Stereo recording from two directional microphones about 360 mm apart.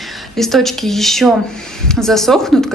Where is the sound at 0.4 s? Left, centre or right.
Centre.